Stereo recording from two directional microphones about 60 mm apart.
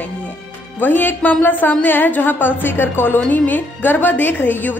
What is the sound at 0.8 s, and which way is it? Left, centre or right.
A woman's voice, left.